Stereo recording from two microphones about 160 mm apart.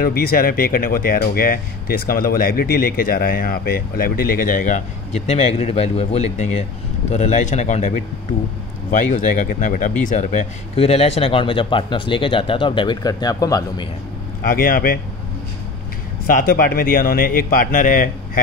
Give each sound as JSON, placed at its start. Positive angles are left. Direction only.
{"t": 0.0, "sound": "speech", "side_deg": 70}
{"t": 14.5, "sound": "speech", "side_deg": 65}
{"t": 16.3, "sound": "speech", "side_deg": 65}